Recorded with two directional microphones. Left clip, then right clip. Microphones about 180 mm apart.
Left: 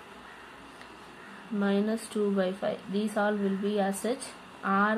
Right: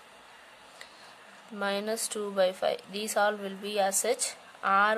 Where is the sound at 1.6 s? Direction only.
50° right (ahead or behind).